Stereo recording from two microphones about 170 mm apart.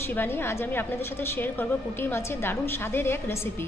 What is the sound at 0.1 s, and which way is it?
A woman's voice, 10° left (ahead or behind).